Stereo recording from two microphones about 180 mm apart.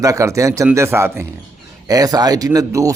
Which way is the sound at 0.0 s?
20° right (ahead or behind).